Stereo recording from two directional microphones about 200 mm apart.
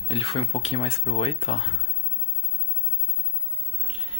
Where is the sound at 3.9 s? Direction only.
30° left (ahead or behind).